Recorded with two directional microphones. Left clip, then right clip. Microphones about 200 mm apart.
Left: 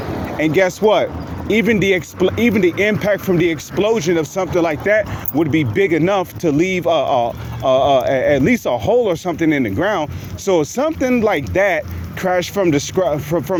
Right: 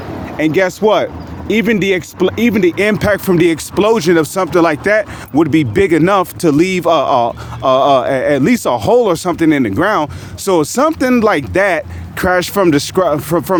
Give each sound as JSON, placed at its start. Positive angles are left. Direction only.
{"t": 0.3, "sound": "speech", "side_deg": -35}